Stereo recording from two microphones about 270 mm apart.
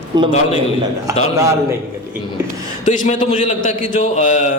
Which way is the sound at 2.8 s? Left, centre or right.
Left.